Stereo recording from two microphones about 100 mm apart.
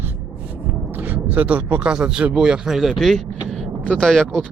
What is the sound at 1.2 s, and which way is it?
Speech, 15° right (ahead or behind).